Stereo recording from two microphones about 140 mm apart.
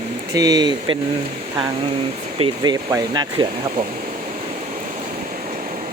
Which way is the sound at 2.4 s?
30° right (ahead or behind).